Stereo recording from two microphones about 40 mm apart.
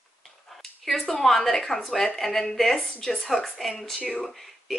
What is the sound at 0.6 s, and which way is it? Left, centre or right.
A woman's voice, centre.